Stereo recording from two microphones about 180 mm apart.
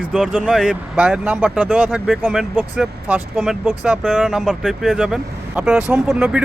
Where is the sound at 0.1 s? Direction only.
Centre (ahead or behind).